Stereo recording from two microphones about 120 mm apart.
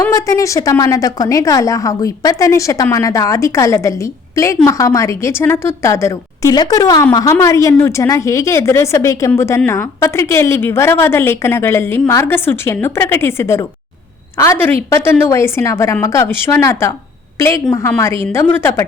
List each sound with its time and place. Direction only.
0.0 s a woman's voice: 25° left (ahead or behind)